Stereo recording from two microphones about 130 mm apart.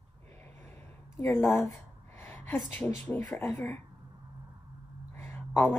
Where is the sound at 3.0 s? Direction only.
10° left (ahead or behind).